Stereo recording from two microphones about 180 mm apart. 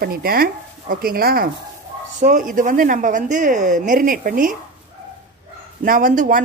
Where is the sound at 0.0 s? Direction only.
55° right (ahead or behind).